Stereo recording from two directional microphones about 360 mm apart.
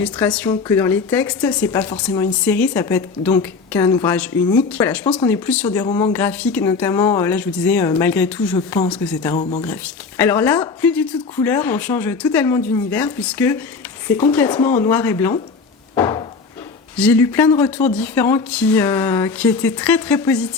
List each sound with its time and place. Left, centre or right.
0.0 s speech: centre
9.3 s speech: centre
10.2 s speech: centre
16.0 s wood: centre
17.0 s speech: centre